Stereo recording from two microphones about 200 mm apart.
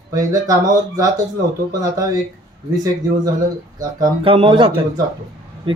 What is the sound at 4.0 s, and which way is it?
A man's voice, 25° right (ahead or behind).